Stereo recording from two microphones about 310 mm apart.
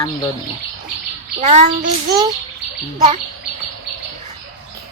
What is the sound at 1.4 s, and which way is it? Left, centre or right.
Speech, right.